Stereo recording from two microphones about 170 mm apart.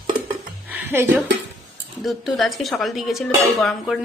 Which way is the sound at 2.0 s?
Centre (ahead or behind).